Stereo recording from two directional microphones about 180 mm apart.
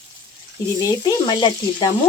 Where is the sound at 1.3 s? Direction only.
25° left (ahead or behind).